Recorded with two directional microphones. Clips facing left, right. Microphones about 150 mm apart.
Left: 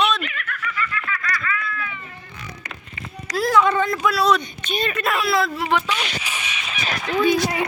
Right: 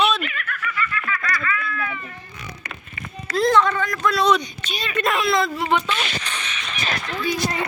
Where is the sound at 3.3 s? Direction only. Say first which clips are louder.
Right 1 dB; 5° left (ahead or behind).